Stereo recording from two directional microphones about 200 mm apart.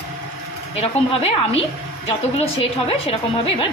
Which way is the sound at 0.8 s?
30° left (ahead or behind).